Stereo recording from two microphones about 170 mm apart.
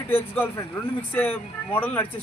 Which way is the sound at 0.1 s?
10° left (ahead or behind).